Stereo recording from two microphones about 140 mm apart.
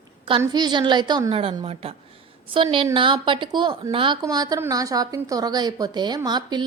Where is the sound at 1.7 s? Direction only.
45° right (ahead or behind).